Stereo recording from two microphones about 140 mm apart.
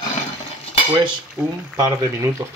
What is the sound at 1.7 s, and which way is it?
Speech, 25° right (ahead or behind).